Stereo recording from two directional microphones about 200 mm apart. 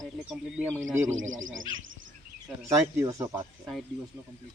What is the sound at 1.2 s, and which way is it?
Speech, 75° right (ahead or behind).